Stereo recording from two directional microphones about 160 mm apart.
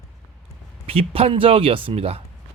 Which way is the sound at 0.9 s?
35° right (ahead or behind).